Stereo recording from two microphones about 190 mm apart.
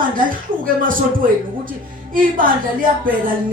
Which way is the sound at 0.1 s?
45° right (ahead or behind).